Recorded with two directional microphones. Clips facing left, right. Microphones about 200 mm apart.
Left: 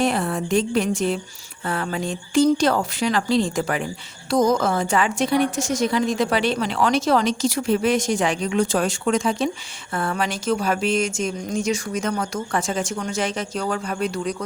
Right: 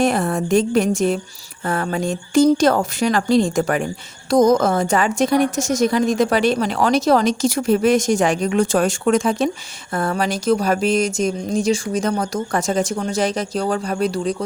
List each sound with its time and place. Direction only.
0.0 s a woman's voice: 45° right (ahead or behind)